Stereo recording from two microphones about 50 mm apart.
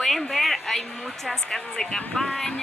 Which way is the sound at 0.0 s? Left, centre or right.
Centre.